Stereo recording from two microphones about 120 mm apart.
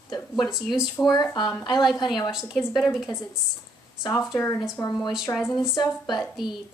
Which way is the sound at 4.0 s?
25° left (ahead or behind).